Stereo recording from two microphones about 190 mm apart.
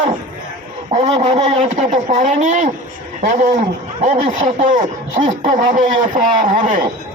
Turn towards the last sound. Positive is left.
turn(degrees=-45)  # may be behind; listen again after turning